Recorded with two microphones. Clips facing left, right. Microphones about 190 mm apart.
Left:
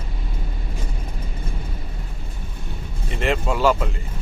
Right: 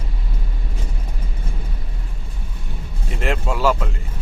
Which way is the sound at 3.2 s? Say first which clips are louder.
Left 1 dB; centre (ahead or behind).